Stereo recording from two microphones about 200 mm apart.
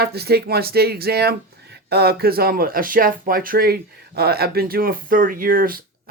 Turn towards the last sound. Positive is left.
turn(degrees=-45)  # may be behind; listen again after turning